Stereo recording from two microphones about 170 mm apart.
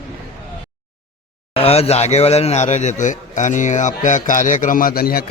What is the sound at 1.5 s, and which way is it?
A man's voice, 35° left (ahead or behind).